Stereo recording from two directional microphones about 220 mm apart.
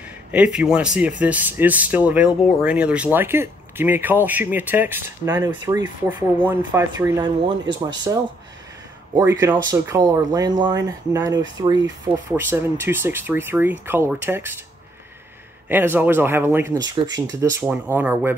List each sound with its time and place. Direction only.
0.3 s speech: 5° right (ahead or behind)
9.4 s speech: 10° right (ahead or behind)
15.7 s speech: 10° right (ahead or behind)